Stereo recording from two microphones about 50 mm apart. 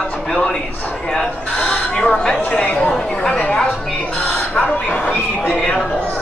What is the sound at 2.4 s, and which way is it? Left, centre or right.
Speech, left.